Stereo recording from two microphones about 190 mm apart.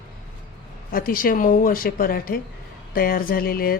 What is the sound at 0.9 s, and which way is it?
Speech, 50° left (ahead or behind).